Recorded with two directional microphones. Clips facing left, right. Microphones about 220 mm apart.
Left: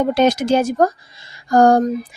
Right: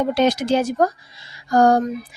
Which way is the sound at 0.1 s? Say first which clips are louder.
Left 3 dB; 50° left (ahead or behind).